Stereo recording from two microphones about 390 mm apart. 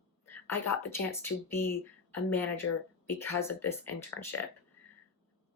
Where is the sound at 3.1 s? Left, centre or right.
Centre.